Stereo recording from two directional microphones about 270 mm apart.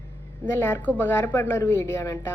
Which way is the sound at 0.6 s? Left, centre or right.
Centre.